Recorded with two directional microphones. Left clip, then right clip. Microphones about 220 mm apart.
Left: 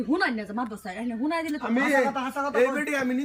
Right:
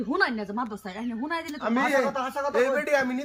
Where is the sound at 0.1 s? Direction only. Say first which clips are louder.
Right 1 dB; 15° right (ahead or behind).